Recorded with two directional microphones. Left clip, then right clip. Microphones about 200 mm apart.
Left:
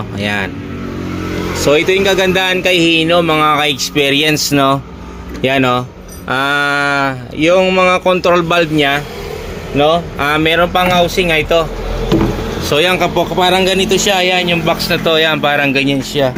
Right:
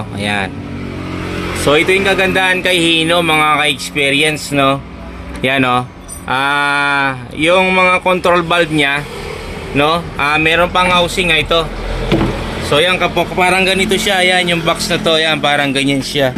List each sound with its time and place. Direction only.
0.2 s speech: centre (ahead or behind)
1.6 s speech: 10° left (ahead or behind)
5.4 s speech: 5° right (ahead or behind)
9.7 s speech: 5° right (ahead or behind)
10.2 s speech: 10° left (ahead or behind)
12.7 s speech: 25° left (ahead or behind)
13.4 s speech: 5° left (ahead or behind)